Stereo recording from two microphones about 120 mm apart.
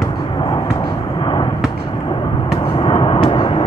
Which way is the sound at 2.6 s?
45° left (ahead or behind).